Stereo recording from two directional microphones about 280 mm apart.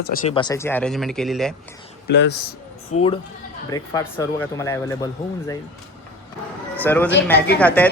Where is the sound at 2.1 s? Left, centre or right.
Left.